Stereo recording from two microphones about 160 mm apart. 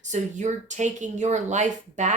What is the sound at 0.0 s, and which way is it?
A woman's voice, 50° right (ahead or behind).